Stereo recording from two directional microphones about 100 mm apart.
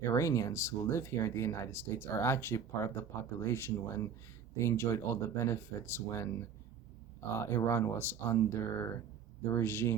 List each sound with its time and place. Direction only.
0.1 s speech: 30° left (ahead or behind)
7.3 s speech: 25° left (ahead or behind)